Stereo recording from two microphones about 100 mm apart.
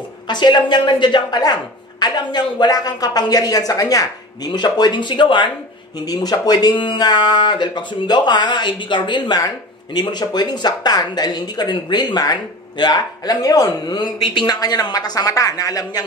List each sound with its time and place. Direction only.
0.3 s speech: 45° left (ahead or behind)
5.9 s speech: 40° left (ahead or behind)